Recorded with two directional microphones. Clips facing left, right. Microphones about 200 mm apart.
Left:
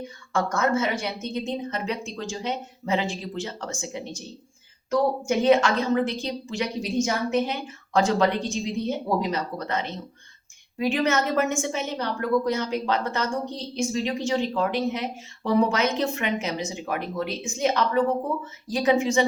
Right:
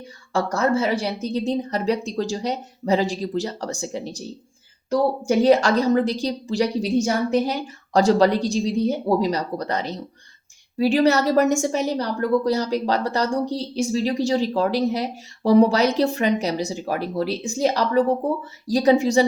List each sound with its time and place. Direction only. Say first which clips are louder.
0.3 s a woman's voice: right 3 dB; 35° right (ahead or behind)